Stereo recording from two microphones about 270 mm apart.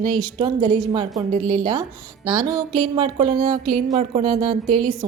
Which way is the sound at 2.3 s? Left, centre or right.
Centre.